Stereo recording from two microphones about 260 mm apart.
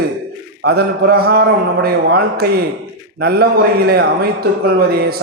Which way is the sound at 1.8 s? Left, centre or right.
Right.